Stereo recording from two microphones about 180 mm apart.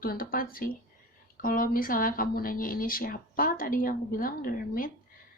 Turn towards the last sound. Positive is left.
turn(degrees=50)  # may be behind; listen again after turning